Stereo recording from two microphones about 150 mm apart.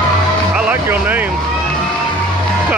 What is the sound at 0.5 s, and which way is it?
Music, 10° right (ahead or behind).